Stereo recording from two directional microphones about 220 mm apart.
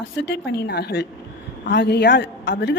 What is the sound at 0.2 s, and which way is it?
A woman's voice, 50° left (ahead or behind).